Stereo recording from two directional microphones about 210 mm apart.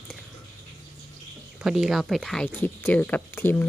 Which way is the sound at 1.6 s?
Centre (ahead or behind).